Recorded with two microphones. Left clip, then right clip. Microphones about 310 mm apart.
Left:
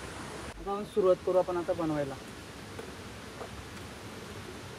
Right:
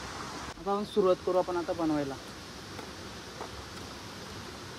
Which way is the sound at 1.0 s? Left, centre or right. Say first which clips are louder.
Left 2 dB; right.